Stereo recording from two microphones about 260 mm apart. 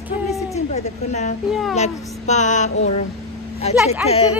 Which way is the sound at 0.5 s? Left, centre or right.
Left.